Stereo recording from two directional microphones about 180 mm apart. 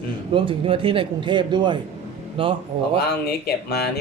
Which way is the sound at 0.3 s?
30° right (ahead or behind).